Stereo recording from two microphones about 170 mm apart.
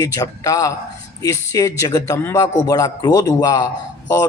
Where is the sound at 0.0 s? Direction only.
20° left (ahead or behind).